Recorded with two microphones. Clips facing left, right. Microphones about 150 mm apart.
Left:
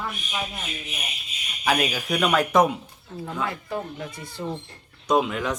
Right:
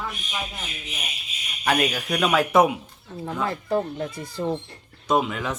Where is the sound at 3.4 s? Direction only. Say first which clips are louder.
Right 5 dB; 35° right (ahead or behind).